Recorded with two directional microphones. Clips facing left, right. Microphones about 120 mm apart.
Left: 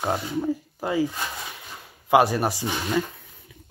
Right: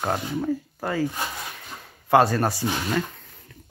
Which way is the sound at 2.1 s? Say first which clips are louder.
Even; 15° left (ahead or behind).